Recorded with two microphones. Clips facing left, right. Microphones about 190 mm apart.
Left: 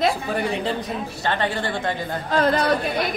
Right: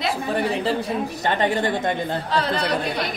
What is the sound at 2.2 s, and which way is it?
Speech, 50° left (ahead or behind).